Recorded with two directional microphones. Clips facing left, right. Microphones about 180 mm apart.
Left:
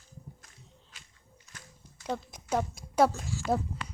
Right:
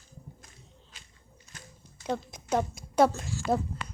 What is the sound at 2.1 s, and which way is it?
A woman's voice, 10° left (ahead or behind).